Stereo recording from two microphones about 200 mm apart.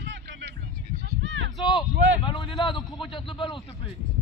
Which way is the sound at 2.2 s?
25° left (ahead or behind).